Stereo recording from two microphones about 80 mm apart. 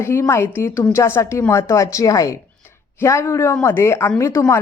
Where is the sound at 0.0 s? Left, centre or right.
Left.